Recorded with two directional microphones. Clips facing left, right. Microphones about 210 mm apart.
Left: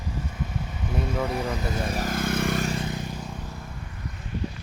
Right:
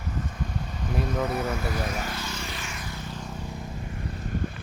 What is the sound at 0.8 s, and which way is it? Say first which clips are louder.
Speech: even; 5° left (ahead or behind).